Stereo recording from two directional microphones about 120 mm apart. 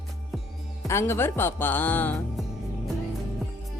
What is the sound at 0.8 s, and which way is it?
Speech, 20° left (ahead or behind).